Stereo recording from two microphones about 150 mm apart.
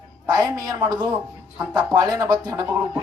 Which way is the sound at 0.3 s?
25° right (ahead or behind).